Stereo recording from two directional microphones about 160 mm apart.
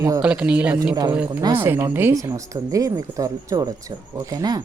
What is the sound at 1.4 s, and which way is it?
Speech, 30° right (ahead or behind).